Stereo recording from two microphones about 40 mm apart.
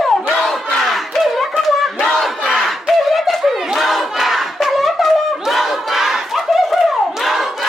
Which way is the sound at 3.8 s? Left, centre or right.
Centre.